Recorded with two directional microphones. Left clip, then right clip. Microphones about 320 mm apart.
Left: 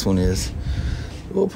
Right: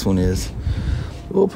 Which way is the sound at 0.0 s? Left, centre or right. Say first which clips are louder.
Right 1 dB; centre.